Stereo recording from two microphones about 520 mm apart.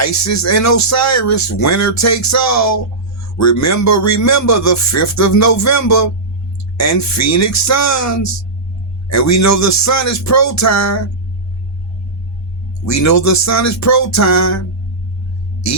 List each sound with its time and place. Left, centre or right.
0.0 s speech: left
12.8 s speech: left
15.6 s speech: left